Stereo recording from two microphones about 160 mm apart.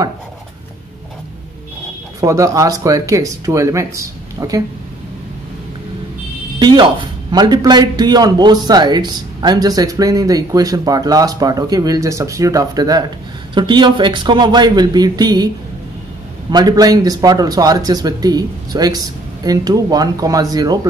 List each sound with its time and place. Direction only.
2.1 s a man's voice: 20° right (ahead or behind)
6.6 s a man's voice: 30° right (ahead or behind)